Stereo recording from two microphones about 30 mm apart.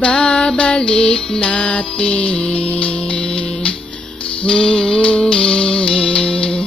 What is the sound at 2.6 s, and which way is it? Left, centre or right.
Music, left.